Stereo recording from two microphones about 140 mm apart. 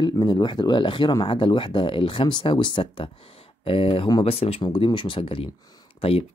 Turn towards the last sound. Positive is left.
turn(degrees=45)  # may be behind; listen again after turning